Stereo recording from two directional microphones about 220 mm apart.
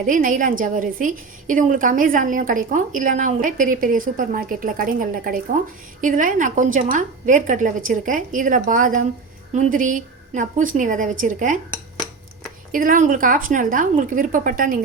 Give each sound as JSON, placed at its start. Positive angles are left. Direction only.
{"t": 0.0, "sound": "a woman's voice", "side_deg": -35}
{"t": 12.7, "sound": "a woman's voice", "side_deg": -35}